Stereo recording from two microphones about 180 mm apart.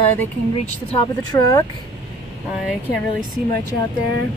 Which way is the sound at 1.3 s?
20° left (ahead or behind).